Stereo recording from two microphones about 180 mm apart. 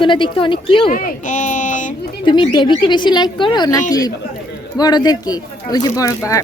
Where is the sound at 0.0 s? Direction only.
25° left (ahead or behind).